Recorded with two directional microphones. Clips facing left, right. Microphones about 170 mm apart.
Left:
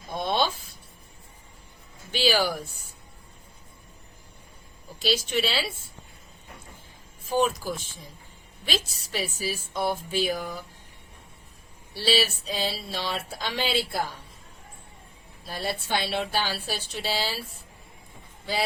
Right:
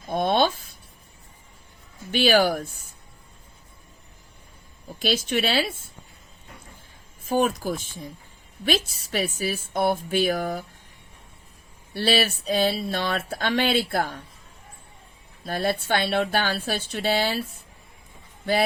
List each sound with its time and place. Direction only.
0.1 s a sound: 55° right (ahead or behind)
2.1 s speech: 55° right (ahead or behind)
4.9 s speech: 50° right (ahead or behind)
7.3 s speech: 50° right (ahead or behind)
11.9 s speech: 55° right (ahead or behind)
15.4 s speech: 55° right (ahead or behind)